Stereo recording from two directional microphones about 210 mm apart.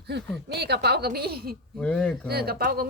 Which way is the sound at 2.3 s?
50° right (ahead or behind).